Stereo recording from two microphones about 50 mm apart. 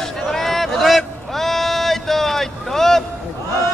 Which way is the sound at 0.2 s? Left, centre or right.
Centre.